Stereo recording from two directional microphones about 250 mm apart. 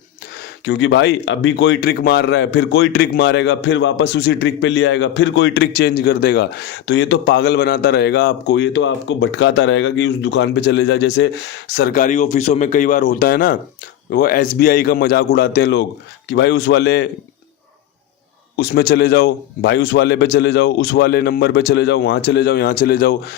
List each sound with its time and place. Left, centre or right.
0.6 s a man's voice: left
18.5 s a man's voice: left